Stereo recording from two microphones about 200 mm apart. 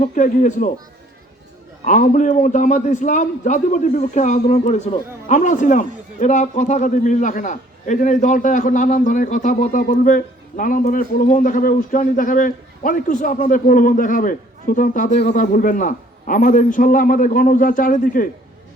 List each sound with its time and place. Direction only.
0.0 s a man's voice: 40° left (ahead or behind)
1.8 s a man's voice: 40° left (ahead or behind)
15.2 s a man's voice: 55° left (ahead or behind)
15.5 s a man's voice: 40° left (ahead or behind)